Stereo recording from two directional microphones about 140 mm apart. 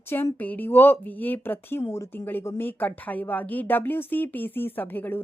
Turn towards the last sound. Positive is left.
turn(degrees=15)  # may be behind; listen again after turning